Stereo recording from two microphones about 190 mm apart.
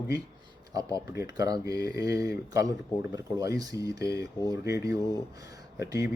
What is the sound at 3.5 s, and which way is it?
Speech, 20° right (ahead or behind).